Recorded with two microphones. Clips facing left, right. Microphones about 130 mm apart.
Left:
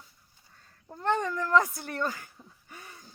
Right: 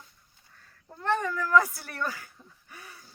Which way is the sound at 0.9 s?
20° left (ahead or behind).